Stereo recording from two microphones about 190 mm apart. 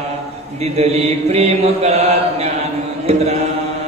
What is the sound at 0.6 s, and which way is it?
Mantra, 35° right (ahead or behind).